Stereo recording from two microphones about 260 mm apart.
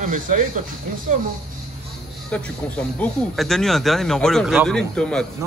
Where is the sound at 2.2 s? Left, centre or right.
Centre.